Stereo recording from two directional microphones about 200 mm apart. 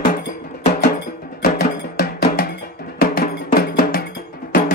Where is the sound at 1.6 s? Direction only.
50° left (ahead or behind).